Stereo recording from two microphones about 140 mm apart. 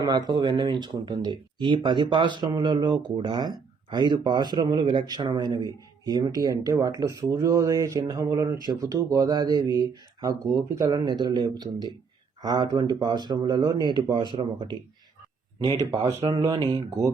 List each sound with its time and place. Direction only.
0.0 s speech: 30° right (ahead or behind)
16.4 s speech: 30° right (ahead or behind)